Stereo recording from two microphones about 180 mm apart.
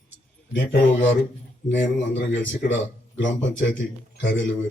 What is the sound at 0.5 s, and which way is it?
A man's voice, 85° left.